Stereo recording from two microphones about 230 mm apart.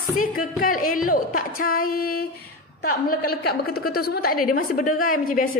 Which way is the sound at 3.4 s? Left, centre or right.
Left.